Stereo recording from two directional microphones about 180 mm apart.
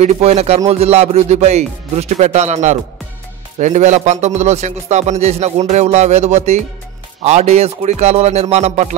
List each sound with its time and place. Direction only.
0.0 s a man's voice: 35° right (ahead or behind)